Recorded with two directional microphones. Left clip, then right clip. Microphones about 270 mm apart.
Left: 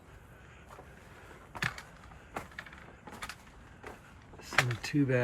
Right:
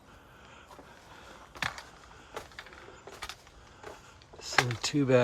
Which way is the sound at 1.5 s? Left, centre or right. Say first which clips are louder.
Right 1 dB; right.